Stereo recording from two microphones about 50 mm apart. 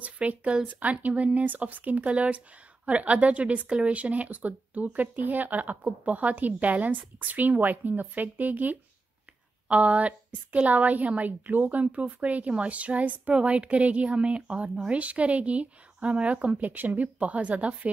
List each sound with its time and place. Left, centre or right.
0.0 s a woman's voice: right
16.7 s a woman's voice: right